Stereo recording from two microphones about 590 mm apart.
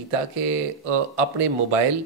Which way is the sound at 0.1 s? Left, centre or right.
Right.